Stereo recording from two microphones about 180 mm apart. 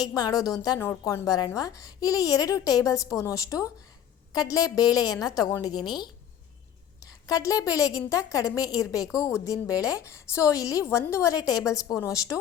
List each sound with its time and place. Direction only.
0.1 s a woman's voice: 20° left (ahead or behind)
7.0 s a woman's voice: 20° left (ahead or behind)